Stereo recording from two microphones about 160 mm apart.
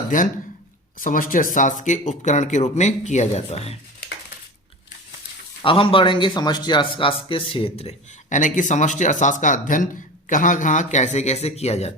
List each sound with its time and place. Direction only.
0.1 s a man's voice: 55° left (ahead or behind); by 3.8 s 40° left (ahead or behind)
5.6 s a man's voice: 35° left (ahead or behind)